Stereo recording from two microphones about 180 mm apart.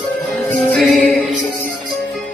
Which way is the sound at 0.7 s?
Centre (ahead or behind).